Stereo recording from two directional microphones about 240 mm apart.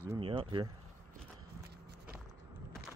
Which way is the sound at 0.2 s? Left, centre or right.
Right.